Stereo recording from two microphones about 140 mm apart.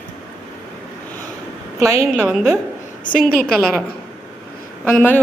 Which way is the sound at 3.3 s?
5° left (ahead or behind).